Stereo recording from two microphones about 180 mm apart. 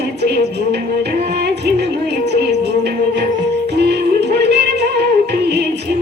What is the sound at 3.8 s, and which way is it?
Music, 70° right (ahead or behind).